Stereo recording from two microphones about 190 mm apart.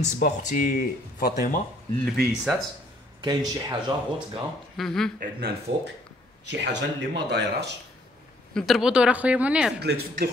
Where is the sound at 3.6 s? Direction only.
20° right (ahead or behind).